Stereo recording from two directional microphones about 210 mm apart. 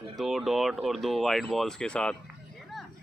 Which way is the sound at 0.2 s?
Centre (ahead or behind).